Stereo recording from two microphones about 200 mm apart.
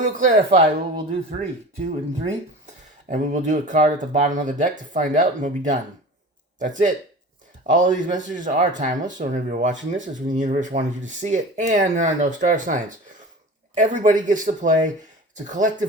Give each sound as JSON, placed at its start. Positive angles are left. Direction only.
{"t": 0.0, "sound": "speech", "side_deg": -40}